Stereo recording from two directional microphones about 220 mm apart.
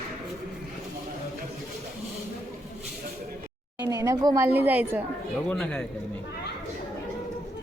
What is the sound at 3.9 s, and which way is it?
A woman's voice, 15° right (ahead or behind).